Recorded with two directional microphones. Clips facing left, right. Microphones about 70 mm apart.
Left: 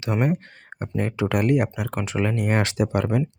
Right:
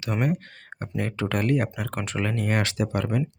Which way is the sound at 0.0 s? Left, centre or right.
Left.